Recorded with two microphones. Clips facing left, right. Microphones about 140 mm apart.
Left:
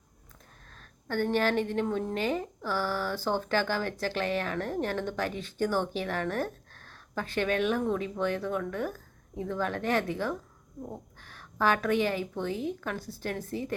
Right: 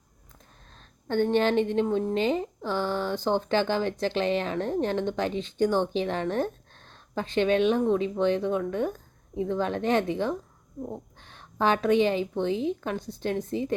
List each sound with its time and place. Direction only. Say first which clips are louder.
0.7 s a woman's voice: right 5 dB; 20° right (ahead or behind)